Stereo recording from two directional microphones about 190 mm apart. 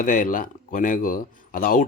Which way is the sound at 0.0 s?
45° left (ahead or behind).